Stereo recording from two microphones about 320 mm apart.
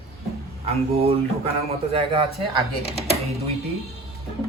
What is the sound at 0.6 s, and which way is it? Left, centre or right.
Speech, centre.